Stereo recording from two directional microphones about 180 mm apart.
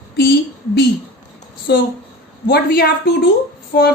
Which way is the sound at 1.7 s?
65° left (ahead or behind).